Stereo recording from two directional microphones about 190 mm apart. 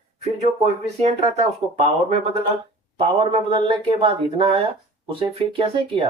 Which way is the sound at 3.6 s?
30° right (ahead or behind).